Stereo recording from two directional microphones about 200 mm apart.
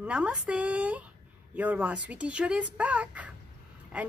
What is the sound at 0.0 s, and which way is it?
A woman's voice, 5° right (ahead or behind).